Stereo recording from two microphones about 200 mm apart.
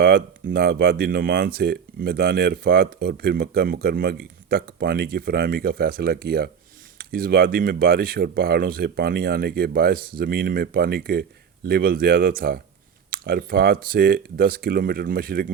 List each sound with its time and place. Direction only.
0.0 s speech: 50° right (ahead or behind)